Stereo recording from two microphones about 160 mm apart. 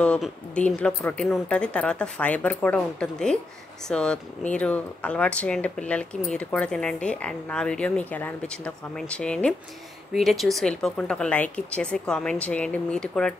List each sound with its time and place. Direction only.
0.0 s speech: 5° left (ahead or behind)